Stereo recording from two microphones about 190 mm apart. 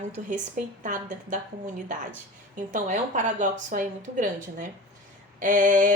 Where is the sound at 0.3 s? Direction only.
40° right (ahead or behind).